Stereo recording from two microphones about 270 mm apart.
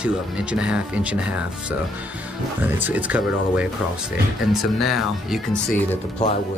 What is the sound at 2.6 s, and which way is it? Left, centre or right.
Speech, centre.